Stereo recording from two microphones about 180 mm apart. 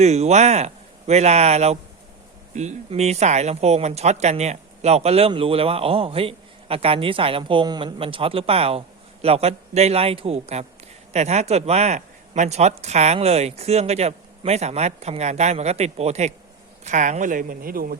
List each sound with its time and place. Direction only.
0.0 s speech: 35° right (ahead or behind); by 17.9 s 55° right (ahead or behind)